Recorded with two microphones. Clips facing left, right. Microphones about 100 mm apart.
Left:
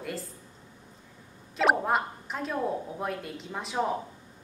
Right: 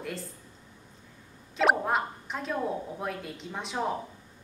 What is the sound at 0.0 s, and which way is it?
Speech, centre (ahead or behind).